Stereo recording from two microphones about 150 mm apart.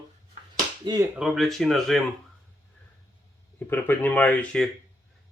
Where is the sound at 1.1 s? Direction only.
5° right (ahead or behind).